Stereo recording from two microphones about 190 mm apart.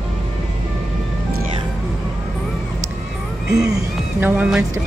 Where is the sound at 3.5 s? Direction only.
20° right (ahead or behind).